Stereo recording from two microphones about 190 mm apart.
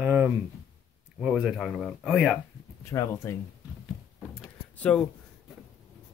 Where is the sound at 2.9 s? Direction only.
15° left (ahead or behind).